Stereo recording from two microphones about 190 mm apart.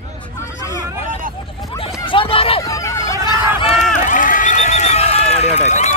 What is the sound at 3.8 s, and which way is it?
Run, 40° left (ahead or behind).